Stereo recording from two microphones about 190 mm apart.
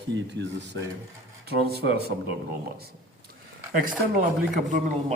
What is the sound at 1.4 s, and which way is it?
Speech, 60° right (ahead or behind).